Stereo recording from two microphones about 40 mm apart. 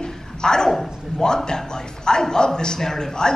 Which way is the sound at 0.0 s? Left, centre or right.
Centre.